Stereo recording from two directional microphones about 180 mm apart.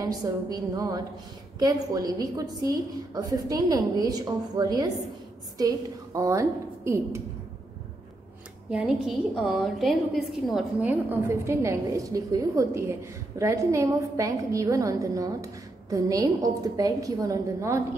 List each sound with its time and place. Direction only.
0.0 s a woman's voice: 20° right (ahead or behind)
8.6 s a woman's voice: 5° right (ahead or behind)